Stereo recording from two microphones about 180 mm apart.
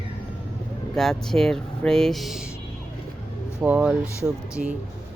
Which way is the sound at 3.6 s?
5° right (ahead or behind).